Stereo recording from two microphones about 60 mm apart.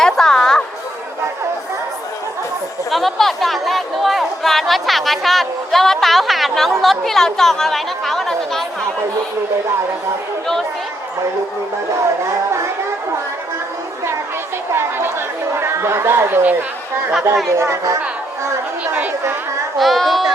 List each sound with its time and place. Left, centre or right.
0.0 s chatter: centre
2.9 s chatter: centre
6.8 s a woman's voice: centre
14.7 s speech: right
17.6 s speech: right
19.8 s a woman's voice: centre